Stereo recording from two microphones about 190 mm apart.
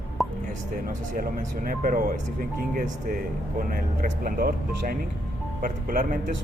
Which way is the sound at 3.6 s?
45° right (ahead or behind).